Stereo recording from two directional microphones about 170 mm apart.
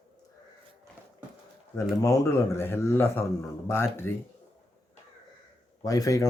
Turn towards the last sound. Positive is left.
turn(degrees=20)  # may be behind; listen again after turning